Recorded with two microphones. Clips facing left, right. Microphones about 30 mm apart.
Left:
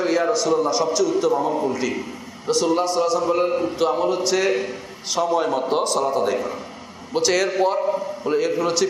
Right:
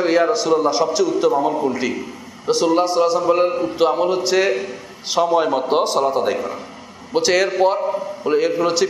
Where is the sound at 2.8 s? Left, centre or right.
Centre.